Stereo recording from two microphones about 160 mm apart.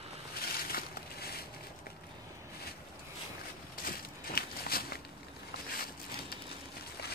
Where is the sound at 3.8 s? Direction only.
70° left (ahead or behind).